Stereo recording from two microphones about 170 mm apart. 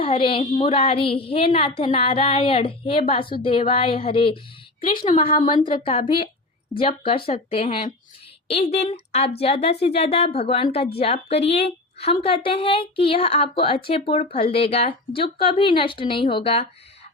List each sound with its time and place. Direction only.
0.0 s a woman's voice: 30° left (ahead or behind)